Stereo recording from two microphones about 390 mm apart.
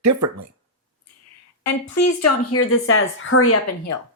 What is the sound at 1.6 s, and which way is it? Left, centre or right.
A woman's voice, left.